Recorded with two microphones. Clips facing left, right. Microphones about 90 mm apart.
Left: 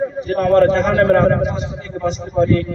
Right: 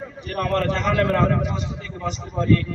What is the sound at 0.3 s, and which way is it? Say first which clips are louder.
A man's voice: left 10 dB; 25° left (ahead or behind).